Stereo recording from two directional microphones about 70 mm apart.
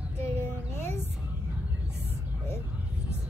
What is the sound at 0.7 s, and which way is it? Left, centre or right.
Speech, left.